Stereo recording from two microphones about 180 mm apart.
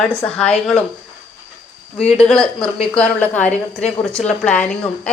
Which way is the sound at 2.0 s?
5° left (ahead or behind).